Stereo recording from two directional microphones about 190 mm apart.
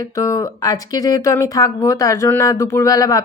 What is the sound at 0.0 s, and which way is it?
Speech, 20° left (ahead or behind).